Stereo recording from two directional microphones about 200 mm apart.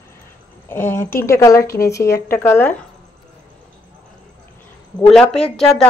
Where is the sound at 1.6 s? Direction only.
50° left (ahead or behind).